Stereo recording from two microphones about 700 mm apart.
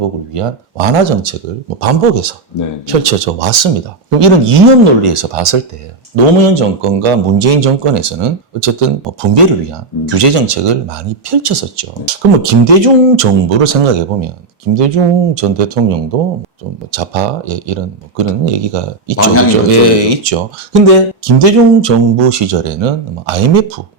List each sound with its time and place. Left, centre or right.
0.3 s speech: right
1.8 s speech: right
19.1 s a man's voice: centre
19.7 s speech: right